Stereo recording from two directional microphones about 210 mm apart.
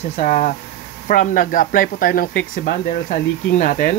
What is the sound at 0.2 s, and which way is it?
Speech, 35° left (ahead or behind).